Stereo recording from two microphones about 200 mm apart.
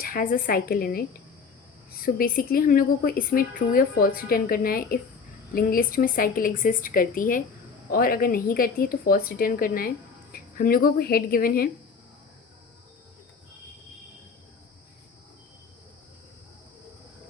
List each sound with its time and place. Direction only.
0.0 s a woman's voice: 45° left (ahead or behind)